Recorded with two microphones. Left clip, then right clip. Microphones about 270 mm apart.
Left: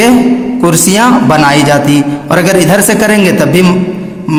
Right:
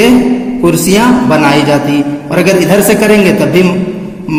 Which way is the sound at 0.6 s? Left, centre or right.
Left.